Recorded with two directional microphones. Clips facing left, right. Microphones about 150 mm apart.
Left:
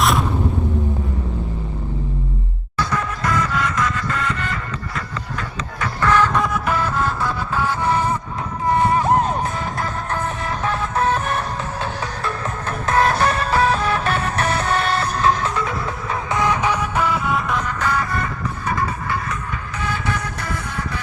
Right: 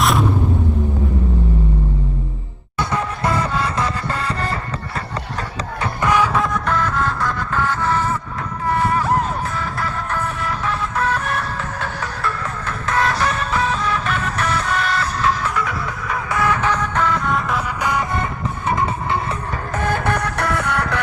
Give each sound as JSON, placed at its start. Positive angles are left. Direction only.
{"t": 0.0, "sound": "music", "side_deg": 0}
{"t": 2.7, "sound": "music", "side_deg": -25}
{"t": 6.0, "sound": "music", "side_deg": -15}
{"t": 6.4, "sound": "music", "side_deg": 5}
{"t": 17.7, "sound": "music", "side_deg": -15}
{"t": 19.7, "sound": "music", "side_deg": -50}